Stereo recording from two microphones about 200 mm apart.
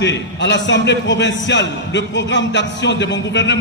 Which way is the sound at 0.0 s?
60° left (ahead or behind).